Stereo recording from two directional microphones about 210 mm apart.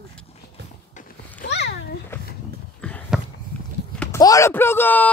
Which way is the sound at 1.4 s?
55° left (ahead or behind).